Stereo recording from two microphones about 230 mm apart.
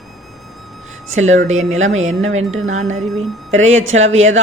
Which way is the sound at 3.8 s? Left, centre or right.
Right.